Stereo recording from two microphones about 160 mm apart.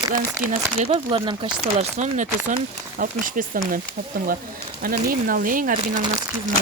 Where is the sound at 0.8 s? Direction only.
30° right (ahead or behind).